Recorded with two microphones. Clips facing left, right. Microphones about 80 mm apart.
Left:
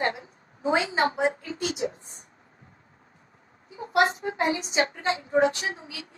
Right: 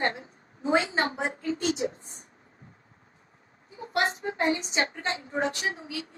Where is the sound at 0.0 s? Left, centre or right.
Right.